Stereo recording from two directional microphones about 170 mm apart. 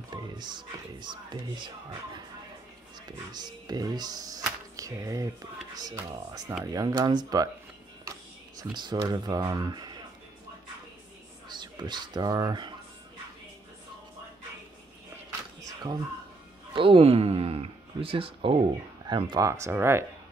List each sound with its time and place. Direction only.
0.1 s speech: 25° right (ahead or behind)
8.5 s speech: 25° right (ahead or behind)
11.4 s speech: 25° right (ahead or behind)
15.6 s a sound: 25° right (ahead or behind)
16.7 s speech: 30° right (ahead or behind); by 20.1 s 15° right (ahead or behind)